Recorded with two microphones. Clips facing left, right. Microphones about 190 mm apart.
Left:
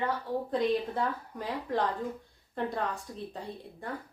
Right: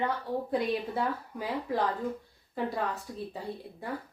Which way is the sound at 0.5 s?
10° right (ahead or behind).